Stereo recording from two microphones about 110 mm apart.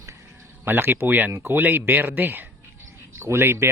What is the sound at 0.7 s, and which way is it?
Speech, 20° right (ahead or behind).